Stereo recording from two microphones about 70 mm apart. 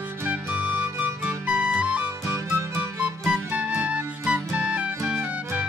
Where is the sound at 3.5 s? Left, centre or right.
Right.